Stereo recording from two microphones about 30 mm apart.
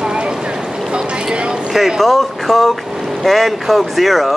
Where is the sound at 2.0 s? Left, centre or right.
Centre.